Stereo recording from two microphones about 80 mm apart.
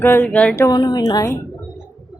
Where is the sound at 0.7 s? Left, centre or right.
Left.